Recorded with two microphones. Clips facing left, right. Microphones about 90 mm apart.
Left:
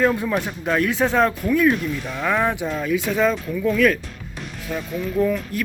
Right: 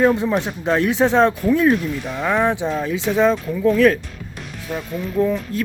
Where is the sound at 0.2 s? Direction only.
20° right (ahead or behind).